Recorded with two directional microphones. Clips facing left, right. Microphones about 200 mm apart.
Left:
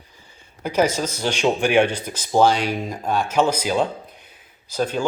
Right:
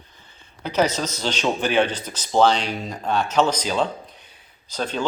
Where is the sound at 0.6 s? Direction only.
10° left (ahead or behind).